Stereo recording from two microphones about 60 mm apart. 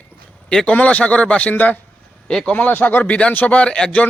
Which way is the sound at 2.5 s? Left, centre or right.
Left.